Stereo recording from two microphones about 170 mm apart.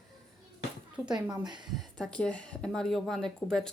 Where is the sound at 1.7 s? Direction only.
5° left (ahead or behind).